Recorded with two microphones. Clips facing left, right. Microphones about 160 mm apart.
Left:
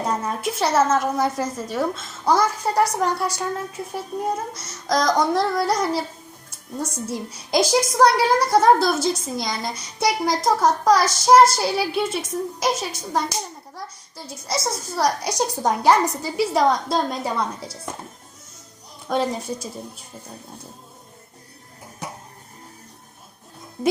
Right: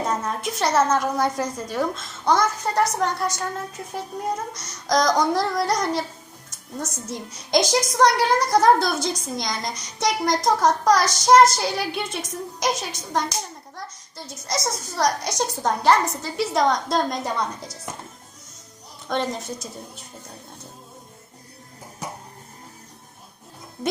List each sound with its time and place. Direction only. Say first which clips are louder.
0.2 s a woman's voice: left 2 dB; 5° left (ahead or behind)
14.4 s a woman's voice: left 1 dB; 10° left (ahead or behind)
19.0 s a woman's voice: left 3 dB; 10° left (ahead or behind)